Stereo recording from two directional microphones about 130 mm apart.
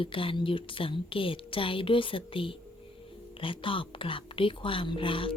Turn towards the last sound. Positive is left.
turn(degrees=40)  # may be behind; listen again after turning